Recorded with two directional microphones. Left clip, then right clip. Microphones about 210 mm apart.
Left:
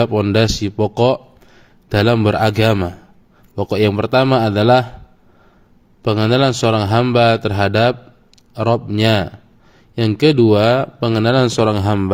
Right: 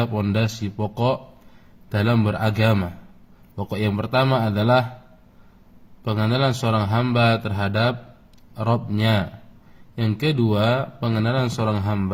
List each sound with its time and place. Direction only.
0.0 s a man's voice: 35° left (ahead or behind)
6.0 s a man's voice: 35° left (ahead or behind)